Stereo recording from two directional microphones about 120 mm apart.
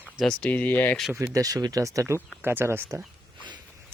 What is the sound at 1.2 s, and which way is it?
Speech, 30° right (ahead or behind).